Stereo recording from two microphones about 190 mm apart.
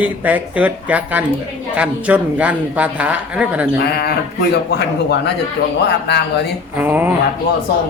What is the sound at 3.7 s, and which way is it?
A man's voice, 55° left (ahead or behind).